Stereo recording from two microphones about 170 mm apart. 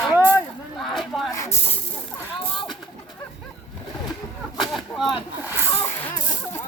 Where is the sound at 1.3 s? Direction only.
20° left (ahead or behind).